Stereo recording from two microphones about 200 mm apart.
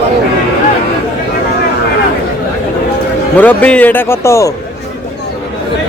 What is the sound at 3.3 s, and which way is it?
A man's voice, 10° left (ahead or behind).